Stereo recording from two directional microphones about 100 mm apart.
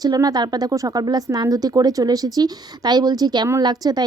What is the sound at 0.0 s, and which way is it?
A woman's voice, 40° right (ahead or behind).